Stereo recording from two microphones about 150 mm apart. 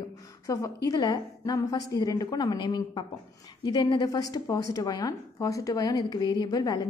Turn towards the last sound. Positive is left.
turn(degrees=25)  # may be behind; listen again after turning